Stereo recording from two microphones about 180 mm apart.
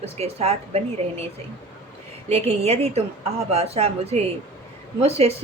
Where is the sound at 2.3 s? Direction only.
35° right (ahead or behind).